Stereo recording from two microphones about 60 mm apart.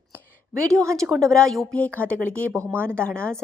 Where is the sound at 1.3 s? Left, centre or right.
Centre.